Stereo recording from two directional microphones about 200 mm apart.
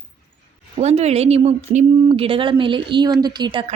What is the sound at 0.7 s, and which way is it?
A woman's voice, 30° right (ahead or behind).